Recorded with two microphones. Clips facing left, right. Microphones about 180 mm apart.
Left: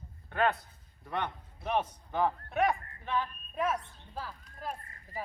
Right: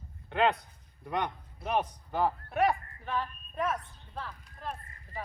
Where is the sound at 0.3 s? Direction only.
20° right (ahead or behind).